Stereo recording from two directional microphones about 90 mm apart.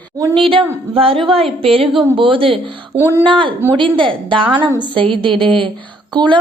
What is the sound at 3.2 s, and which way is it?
A woman's voice, 70° right (ahead or behind).